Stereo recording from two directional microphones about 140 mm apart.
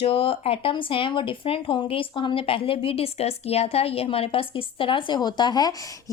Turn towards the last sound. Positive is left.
turn(degrees=30)  # may be behind; listen again after turning